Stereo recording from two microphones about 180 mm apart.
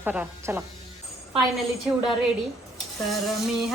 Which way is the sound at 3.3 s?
Centre (ahead or behind).